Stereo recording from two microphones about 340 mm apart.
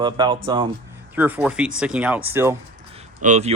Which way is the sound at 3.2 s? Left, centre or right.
Centre.